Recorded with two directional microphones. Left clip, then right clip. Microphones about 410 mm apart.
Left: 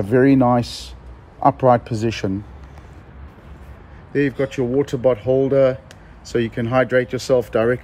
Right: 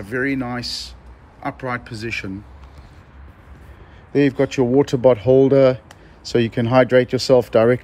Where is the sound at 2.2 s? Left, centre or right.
Left.